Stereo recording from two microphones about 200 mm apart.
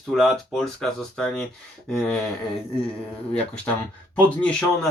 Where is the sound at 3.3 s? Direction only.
5° left (ahead or behind).